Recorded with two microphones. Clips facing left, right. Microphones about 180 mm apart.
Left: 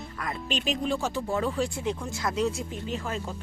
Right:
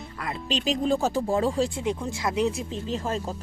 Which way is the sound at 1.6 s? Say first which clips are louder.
Right 3 dB; 20° right (ahead or behind).